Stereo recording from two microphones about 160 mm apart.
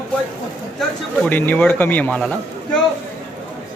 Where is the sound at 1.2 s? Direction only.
10° left (ahead or behind).